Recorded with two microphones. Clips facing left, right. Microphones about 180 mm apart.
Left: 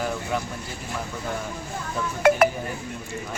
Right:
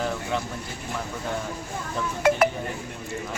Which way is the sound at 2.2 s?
60° left (ahead or behind).